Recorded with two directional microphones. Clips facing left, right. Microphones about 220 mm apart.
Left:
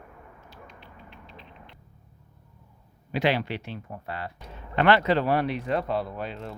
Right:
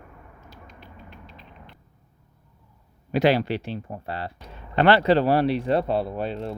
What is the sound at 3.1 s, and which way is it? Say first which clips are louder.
Speech: right 5 dB; 40° right (ahead or behind).